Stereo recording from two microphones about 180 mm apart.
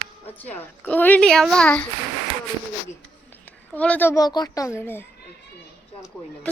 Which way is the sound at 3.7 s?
10° left (ahead or behind).